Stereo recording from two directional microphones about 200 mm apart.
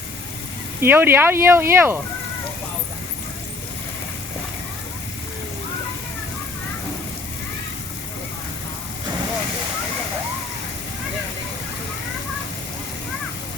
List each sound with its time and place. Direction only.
0.8 s speech: 10° right (ahead or behind)